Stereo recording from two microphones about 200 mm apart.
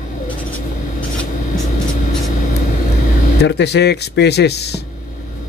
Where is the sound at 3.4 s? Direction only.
60° left (ahead or behind).